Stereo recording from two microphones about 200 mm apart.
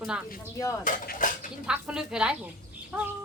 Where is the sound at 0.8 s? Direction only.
40° left (ahead or behind).